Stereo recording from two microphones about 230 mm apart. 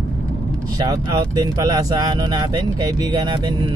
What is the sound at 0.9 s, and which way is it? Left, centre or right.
Speech, centre.